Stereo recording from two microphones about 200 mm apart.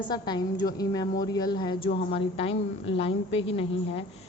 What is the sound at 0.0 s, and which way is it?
A man's voice, 20° left (ahead or behind).